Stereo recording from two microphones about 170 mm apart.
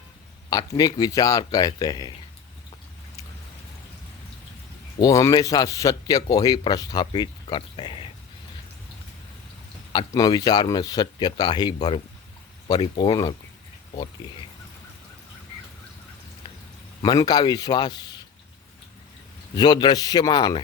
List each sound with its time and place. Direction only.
0.5 s a man's voice: 20° left (ahead or behind)
4.9 s a man's voice: 20° left (ahead or behind)
9.9 s a man's voice: 25° left (ahead or behind)
17.0 s a man's voice: 25° left (ahead or behind)
19.5 s a man's voice: 25° left (ahead or behind)